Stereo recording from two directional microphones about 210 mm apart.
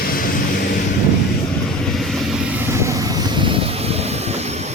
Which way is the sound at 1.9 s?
Centre (ahead or behind).